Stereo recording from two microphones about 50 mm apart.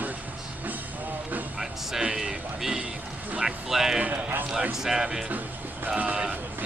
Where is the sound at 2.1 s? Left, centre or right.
Centre.